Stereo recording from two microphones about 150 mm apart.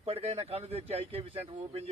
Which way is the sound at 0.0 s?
40° right (ahead or behind).